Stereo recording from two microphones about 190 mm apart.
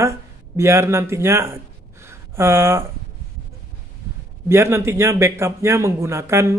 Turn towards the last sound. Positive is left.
turn(degrees=-15)  # may be behind; listen again after turning